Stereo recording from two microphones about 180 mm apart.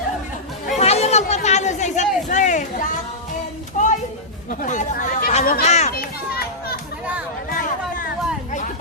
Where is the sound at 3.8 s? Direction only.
45° left (ahead or behind).